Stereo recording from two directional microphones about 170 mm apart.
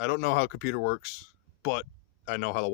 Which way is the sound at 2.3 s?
80° left.